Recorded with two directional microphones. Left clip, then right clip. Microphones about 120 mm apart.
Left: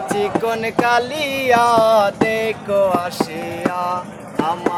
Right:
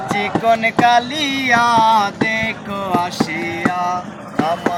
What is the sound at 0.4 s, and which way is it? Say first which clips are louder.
Music: right 9 dB; 45° left (ahead or behind).